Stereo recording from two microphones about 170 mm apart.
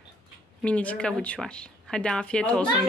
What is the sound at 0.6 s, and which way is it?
Speech, 5° left (ahead or behind).